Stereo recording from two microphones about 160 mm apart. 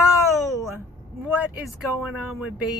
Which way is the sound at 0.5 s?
20° right (ahead or behind).